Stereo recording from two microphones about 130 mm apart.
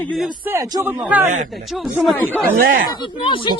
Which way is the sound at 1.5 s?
Centre (ahead or behind).